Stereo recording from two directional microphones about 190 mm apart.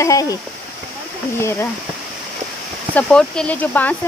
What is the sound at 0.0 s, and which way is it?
Speech, 15° left (ahead or behind).